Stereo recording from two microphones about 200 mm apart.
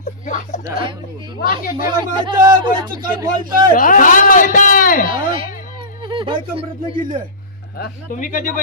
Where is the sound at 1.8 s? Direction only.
20° right (ahead or behind).